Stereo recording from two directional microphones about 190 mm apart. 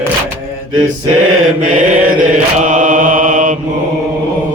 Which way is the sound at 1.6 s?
45° right (ahead or behind).